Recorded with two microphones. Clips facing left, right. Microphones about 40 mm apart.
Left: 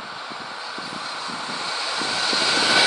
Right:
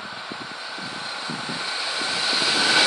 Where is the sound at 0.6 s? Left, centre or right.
Centre.